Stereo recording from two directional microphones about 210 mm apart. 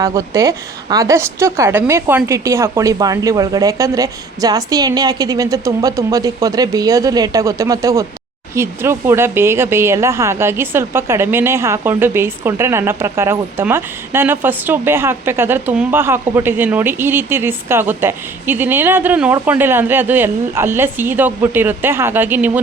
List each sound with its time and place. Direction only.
0.0 s speech: 15° right (ahead or behind)